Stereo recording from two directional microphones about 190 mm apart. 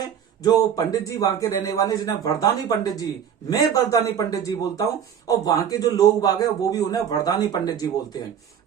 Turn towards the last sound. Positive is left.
turn(degrees=20)  # may be behind; listen again after turning